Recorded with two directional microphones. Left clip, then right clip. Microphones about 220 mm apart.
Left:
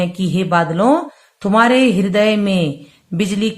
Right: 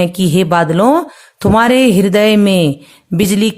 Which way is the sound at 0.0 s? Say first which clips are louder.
Right 7 dB; 50° right (ahead or behind).